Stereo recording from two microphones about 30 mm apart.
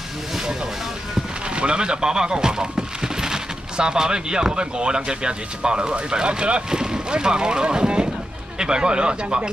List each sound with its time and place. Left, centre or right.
1.5 s speech: right
6.7 s speech: right